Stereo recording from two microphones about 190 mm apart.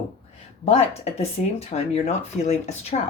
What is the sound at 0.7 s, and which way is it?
Speech, 35° left (ahead or behind).